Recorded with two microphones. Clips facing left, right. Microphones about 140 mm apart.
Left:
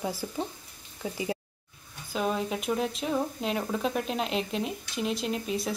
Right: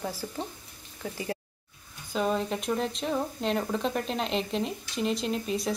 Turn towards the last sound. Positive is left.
turn(degrees=0)  # may be behind; listen again after turning